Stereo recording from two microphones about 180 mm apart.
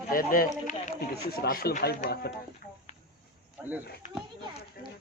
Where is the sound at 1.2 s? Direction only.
60° left (ahead or behind).